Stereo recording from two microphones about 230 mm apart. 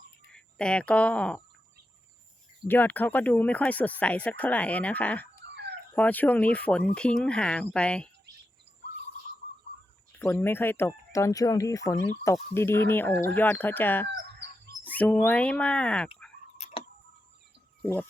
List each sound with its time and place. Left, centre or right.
0.3 s speech: centre
2.6 s speech: centre
10.1 s speech: centre
16.6 s tick-tock: left
17.8 s speech: centre